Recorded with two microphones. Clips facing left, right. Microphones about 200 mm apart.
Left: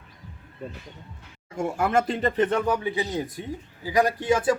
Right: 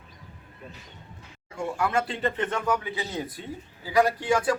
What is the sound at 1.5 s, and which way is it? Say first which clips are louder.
Speech: left 3 dB; 45° left (ahead or behind).